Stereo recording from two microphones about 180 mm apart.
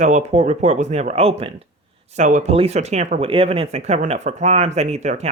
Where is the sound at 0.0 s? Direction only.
40° right (ahead or behind).